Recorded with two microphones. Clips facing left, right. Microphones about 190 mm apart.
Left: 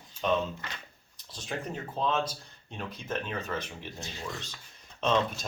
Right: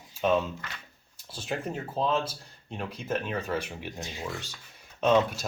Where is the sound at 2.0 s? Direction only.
35° right (ahead or behind).